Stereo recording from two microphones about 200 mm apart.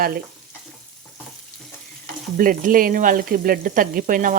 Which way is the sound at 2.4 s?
45° right (ahead or behind).